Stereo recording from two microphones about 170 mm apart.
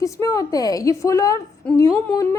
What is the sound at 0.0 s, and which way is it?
A woman's voice, 20° left (ahead or behind).